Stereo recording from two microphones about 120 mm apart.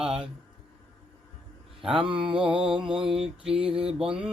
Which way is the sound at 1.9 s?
45° right (ahead or behind).